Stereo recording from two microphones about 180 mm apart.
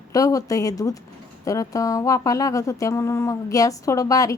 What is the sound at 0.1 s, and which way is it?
Speech, 20° left (ahead or behind).